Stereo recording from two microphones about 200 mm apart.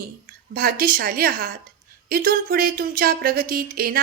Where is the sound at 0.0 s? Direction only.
45° right (ahead or behind).